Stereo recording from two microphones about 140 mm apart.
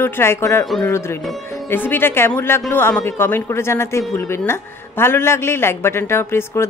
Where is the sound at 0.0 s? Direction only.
15° left (ahead or behind).